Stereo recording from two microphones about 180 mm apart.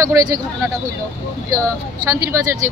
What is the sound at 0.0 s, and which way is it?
Speech, 15° right (ahead or behind).